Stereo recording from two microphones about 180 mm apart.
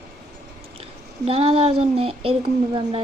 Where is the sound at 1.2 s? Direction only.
35° right (ahead or behind).